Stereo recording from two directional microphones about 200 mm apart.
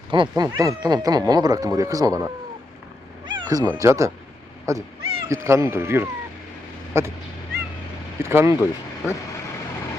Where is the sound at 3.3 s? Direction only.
20° right (ahead or behind).